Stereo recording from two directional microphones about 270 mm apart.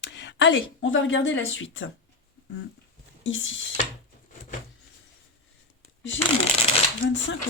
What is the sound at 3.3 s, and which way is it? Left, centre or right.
Speech, left.